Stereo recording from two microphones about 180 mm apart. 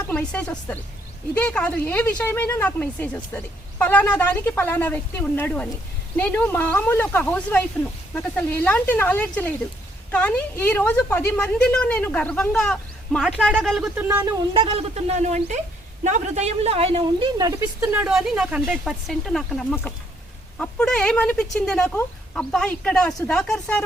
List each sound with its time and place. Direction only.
0.1 s a woman's voice: 5° left (ahead or behind)
14.5 s a man's voice: 30° right (ahead or behind)
17.3 s speech: 20° right (ahead or behind)
17.9 s a woman's voice: 5° right (ahead or behind)